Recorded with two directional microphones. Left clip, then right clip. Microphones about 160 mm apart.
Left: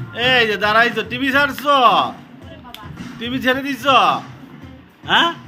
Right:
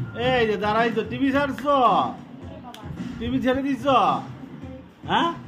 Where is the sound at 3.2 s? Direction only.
5° right (ahead or behind).